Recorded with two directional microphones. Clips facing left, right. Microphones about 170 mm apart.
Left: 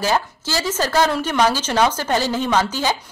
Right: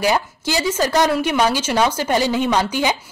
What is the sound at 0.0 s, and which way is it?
A woman's voice, 15° right (ahead or behind).